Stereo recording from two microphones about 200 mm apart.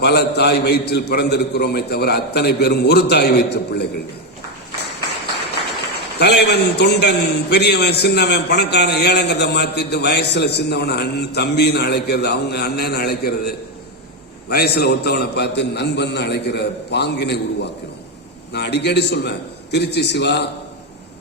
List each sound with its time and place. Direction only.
0.0 s a man's voice: 55° left (ahead or behind)
6.1 s a man's voice: 55° left (ahead or behind)